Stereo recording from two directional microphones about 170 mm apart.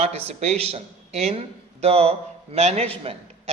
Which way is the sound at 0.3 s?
40° right (ahead or behind).